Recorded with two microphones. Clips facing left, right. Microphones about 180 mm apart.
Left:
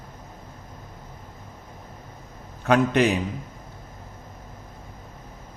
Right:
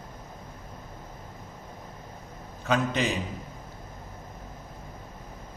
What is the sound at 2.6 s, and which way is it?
Speech, 60° left (ahead or behind).